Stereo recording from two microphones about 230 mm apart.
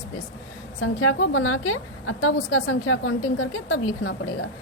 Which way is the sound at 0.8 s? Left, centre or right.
Left.